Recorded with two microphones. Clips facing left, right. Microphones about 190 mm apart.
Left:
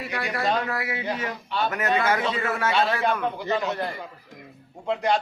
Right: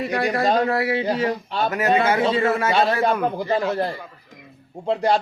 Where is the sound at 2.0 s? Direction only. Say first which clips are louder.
Right 5 dB; 25° right (ahead or behind).